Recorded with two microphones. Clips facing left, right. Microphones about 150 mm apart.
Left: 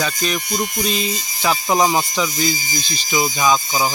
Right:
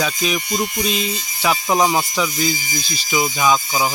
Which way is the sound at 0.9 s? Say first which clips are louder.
Even; 40° left (ahead or behind).